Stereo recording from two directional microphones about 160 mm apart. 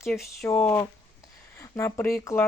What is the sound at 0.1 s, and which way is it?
Speech, 5° left (ahead or behind).